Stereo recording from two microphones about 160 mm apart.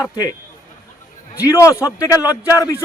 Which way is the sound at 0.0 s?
25° left (ahead or behind).